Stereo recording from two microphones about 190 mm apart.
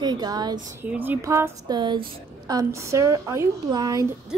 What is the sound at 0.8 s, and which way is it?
A woman's voice, 10° right (ahead or behind).